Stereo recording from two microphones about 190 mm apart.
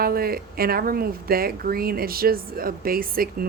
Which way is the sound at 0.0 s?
50° right (ahead or behind).